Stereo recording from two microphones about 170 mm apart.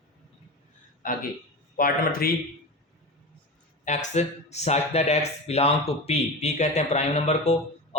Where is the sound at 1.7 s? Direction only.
60° left (ahead or behind).